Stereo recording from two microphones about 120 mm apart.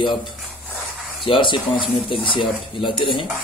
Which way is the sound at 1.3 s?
45° left (ahead or behind).